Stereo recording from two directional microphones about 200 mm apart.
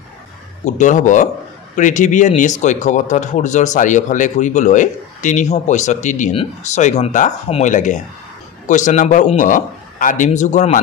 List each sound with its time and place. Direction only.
0.7 s speech: 40° left (ahead or behind)